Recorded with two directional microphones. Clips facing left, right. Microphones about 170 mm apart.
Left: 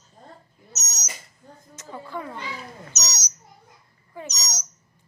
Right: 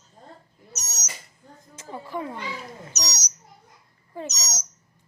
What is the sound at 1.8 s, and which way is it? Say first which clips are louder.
Speech: right 2 dB; 20° right (ahead or behind).